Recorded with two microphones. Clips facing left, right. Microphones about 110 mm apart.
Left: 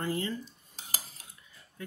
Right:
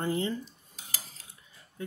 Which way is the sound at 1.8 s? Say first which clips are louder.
Right 4 dB; 25° right (ahead or behind).